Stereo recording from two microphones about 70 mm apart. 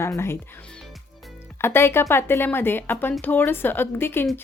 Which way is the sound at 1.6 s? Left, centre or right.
Left.